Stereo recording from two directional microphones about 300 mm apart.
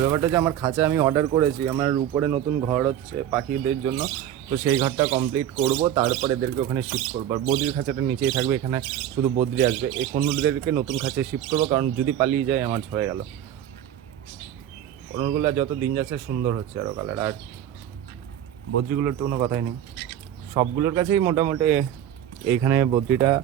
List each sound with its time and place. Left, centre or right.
0.0 s speech: centre
4.4 s speech: centre
15.1 s speech: centre
18.9 s speech: centre